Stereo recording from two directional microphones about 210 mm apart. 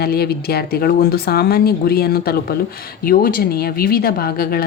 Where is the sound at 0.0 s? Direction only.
50° left (ahead or behind).